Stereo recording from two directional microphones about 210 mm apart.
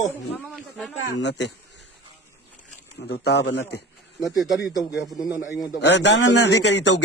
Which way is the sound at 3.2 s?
55° left (ahead or behind).